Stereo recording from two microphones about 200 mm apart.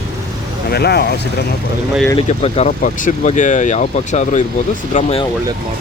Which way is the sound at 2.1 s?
25° left (ahead or behind).